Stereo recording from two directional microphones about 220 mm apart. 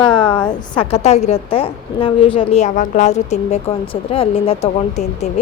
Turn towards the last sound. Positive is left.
turn(degrees=30)  # may be behind; listen again after turning